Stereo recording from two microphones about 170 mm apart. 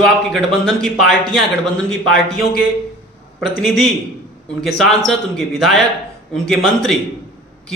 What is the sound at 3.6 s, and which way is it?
A man's voice, centre (ahead or behind).